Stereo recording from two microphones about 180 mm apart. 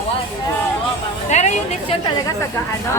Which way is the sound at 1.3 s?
40° left (ahead or behind).